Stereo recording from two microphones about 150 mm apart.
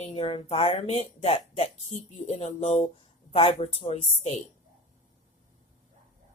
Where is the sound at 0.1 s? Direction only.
40° left (ahead or behind).